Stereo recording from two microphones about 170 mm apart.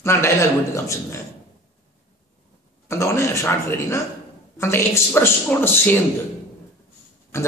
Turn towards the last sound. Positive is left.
turn(degrees=15)  # may be behind; listen again after turning